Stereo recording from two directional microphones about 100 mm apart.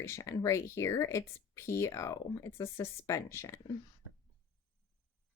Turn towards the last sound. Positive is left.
turn(degrees=30)  # may be behind; listen again after turning